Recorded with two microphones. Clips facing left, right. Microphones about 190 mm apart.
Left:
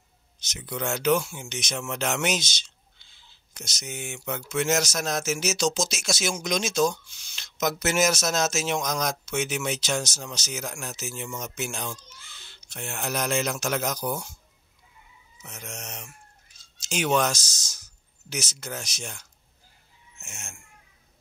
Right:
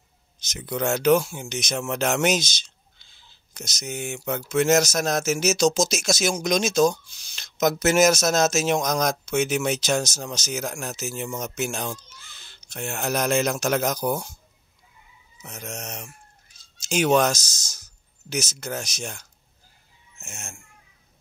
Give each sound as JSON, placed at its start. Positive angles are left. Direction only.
{"t": 0.4, "sound": "speech", "side_deg": -40}
{"t": 15.4, "sound": "speech", "side_deg": -40}